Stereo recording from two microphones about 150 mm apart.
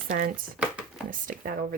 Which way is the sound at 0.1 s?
70° right (ahead or behind).